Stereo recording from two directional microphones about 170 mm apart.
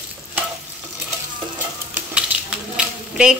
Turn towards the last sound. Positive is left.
turn(degrees=-5)  # may be behind; listen again after turning